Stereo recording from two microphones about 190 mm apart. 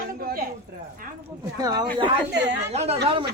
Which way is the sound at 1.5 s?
20° right (ahead or behind).